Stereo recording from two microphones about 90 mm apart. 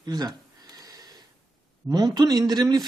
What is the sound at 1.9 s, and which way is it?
Speech, 45° right (ahead or behind).